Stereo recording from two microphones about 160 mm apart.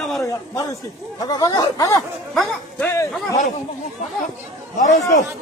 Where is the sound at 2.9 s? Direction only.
20° left (ahead or behind).